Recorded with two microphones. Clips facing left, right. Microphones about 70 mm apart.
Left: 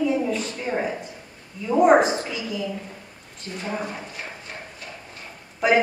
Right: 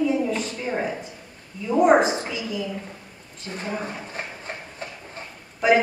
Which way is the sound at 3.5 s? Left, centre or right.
Right.